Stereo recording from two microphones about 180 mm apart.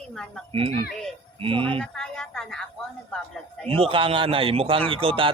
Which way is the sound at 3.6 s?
30° right (ahead or behind).